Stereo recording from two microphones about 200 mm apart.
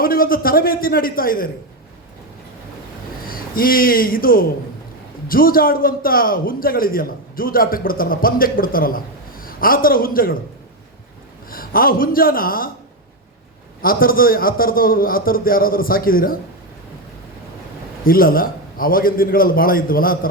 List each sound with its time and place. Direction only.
0.0 s a man's voice: 45° left (ahead or behind)
3.2 s a man's voice: 45° left (ahead or behind)
11.5 s a man's voice: 45° left (ahead or behind)
13.8 s a man's voice: 45° left (ahead or behind)
18.0 s a man's voice: 45° left (ahead or behind)